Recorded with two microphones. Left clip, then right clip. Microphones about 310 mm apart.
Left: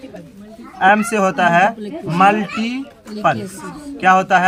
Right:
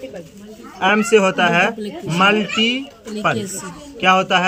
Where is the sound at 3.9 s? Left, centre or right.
Left.